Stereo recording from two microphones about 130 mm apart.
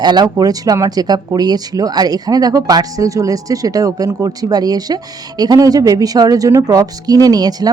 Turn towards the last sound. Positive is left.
turn(degrees=-30)  # may be behind; listen again after turning